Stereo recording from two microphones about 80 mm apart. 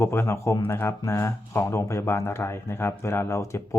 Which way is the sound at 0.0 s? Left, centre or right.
Left.